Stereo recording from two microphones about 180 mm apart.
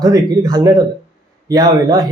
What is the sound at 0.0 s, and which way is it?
Speech, 20° right (ahead or behind).